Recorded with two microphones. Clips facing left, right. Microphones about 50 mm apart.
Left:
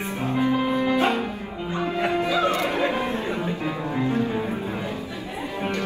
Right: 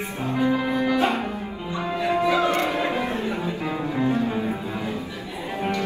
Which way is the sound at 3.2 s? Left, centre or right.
Left.